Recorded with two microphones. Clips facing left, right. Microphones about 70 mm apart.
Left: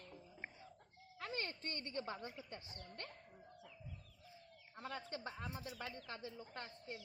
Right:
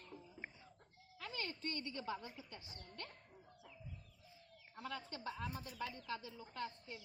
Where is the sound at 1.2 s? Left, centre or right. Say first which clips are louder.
Left 1 dB; left.